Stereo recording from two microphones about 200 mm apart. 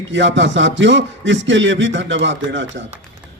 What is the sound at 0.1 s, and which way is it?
A man's voice, 65° right (ahead or behind).